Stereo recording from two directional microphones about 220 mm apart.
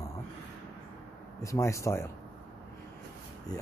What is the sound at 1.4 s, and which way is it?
Speech, 15° left (ahead or behind).